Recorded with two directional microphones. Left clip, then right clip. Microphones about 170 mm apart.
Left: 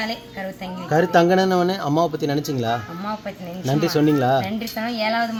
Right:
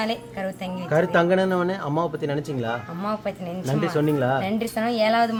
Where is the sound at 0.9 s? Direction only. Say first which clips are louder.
Left 3 dB; 70° left (ahead or behind).